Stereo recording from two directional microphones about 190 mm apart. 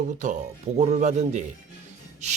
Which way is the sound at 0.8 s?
35° right (ahead or behind).